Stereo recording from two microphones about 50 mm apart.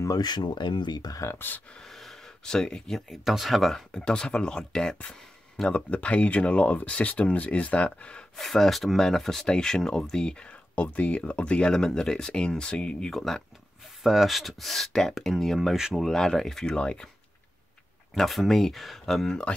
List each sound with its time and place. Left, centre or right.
1.3 s speech: left
1.7 s speech: centre
3.1 s speech: centre
3.9 s speech: centre
8.4 s speech: centre
13.1 s speech: centre
15.7 s speech: centre
16.0 s speech: centre
18.1 s speech: centre